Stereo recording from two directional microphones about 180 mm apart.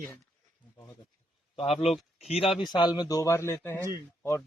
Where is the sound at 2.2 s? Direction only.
35° left (ahead or behind).